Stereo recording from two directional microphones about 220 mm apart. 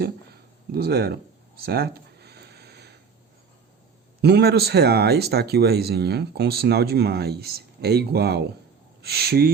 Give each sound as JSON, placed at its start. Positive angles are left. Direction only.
{"t": 0.7, "sound": "speech", "side_deg": -45}
{"t": 1.6, "sound": "a sound", "side_deg": -45}
{"t": 4.2, "sound": "speech", "side_deg": -50}